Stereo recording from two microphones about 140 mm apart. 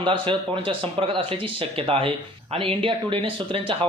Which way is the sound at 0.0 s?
35° right (ahead or behind).